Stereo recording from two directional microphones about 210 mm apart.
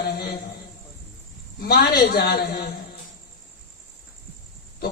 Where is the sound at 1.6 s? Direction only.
45° left (ahead or behind).